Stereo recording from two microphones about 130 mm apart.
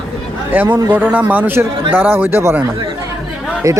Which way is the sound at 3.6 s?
25° right (ahead or behind).